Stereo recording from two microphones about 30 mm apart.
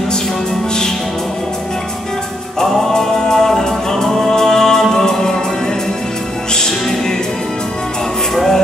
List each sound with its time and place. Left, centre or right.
2.6 s music: centre
3.1 s music: left
3.4 s music: centre